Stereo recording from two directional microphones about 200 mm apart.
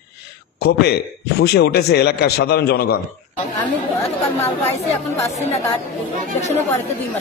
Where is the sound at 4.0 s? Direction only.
10° left (ahead or behind).